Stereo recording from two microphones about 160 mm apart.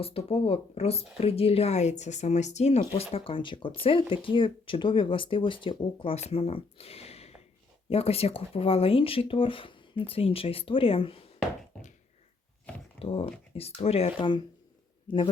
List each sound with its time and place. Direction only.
0.0 s speech: 35° left (ahead or behind)
11.7 s a sound: 5° left (ahead or behind)
13.0 s speech: 35° left (ahead or behind)
14.2 s a man's voice: 30° left (ahead or behind)